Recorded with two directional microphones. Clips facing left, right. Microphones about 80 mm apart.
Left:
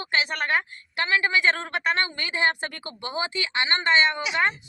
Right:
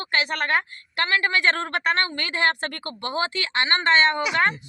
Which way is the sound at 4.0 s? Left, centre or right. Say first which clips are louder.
Right 2 dB; right.